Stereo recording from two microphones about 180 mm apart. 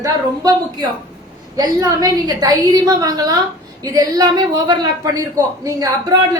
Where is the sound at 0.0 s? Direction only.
20° right (ahead or behind).